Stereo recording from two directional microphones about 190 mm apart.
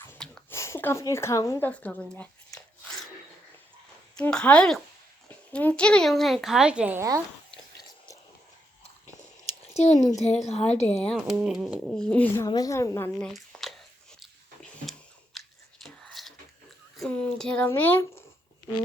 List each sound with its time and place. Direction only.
0.0 s a sound: 10° left (ahead or behind)
0.5 s speech: 15° left (ahead or behind)
2.1 s a sound: 5° left (ahead or behind)
4.2 s speech: 5° left (ahead or behind); by 7.2 s 15° right (ahead or behind)
9.7 s a woman's voice: 35° left (ahead or behind)
11.0 s speech: centre (ahead or behind)
12.5 s a woman's voice: 20° left (ahead or behind)
13.1 s a sound: centre (ahead or behind)
15.4 s whispering: centre (ahead or behind)
17.0 s speech: 5° left (ahead or behind)